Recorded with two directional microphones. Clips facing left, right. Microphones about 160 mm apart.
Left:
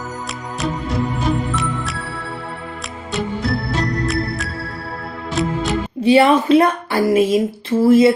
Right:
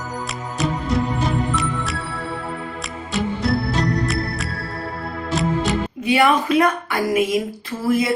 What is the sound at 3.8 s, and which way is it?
Music, centre (ahead or behind).